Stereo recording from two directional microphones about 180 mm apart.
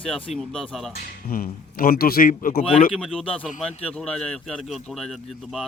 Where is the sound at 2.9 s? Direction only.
Centre (ahead or behind).